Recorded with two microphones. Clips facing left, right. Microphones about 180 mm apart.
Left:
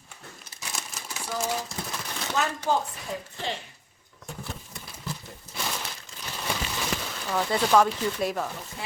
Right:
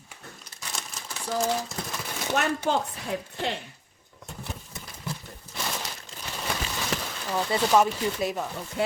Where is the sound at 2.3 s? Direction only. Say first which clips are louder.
Right 1 dB; 60° right (ahead or behind).